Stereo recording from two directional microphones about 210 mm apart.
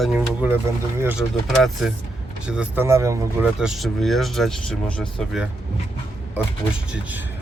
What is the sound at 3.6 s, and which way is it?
Speech, centre (ahead or behind).